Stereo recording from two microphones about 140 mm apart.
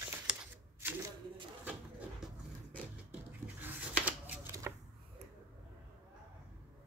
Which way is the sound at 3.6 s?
15° right (ahead or behind).